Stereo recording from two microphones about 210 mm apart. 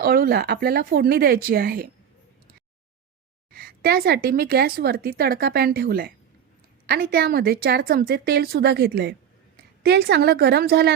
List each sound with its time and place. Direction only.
0.0 s a woman's voice: 45° right (ahead or behind)
3.5 s a woman's voice: 45° right (ahead or behind)